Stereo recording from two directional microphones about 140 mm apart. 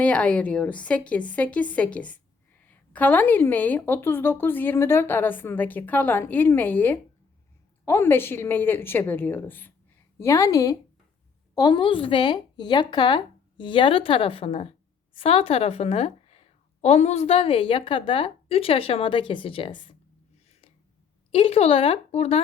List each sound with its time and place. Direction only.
0.0 s a woman's voice: 10° left (ahead or behind); by 20.0 s 40° left (ahead or behind)
21.3 s a woman's voice: 45° left (ahead or behind)